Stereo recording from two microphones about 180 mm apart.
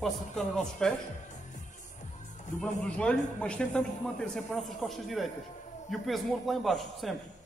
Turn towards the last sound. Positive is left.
turn(degrees=0)  # may be behind; listen again after turning